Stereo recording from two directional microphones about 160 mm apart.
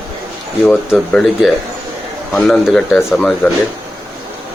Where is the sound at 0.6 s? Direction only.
5° left (ahead or behind).